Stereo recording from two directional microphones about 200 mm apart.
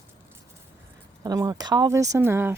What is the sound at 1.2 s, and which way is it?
Speech, 20° right (ahead or behind).